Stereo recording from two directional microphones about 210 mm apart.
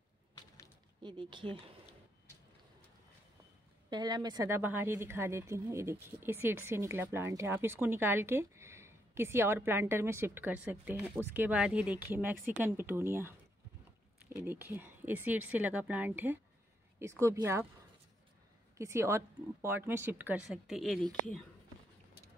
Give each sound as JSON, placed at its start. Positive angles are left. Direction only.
{"t": 1.0, "sound": "speech", "side_deg": -20}
{"t": 3.9, "sound": "speech", "side_deg": -20}
{"t": 14.4, "sound": "speech", "side_deg": -10}
{"t": 18.8, "sound": "speech", "side_deg": -15}